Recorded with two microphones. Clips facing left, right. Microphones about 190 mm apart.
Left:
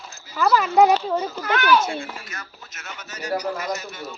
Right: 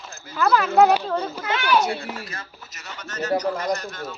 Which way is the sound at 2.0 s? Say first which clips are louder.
Right 2 dB; 35° right (ahead or behind).